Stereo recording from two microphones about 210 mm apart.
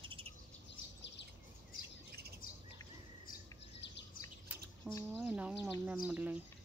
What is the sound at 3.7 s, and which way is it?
Bird vocalization, 55° left (ahead or behind).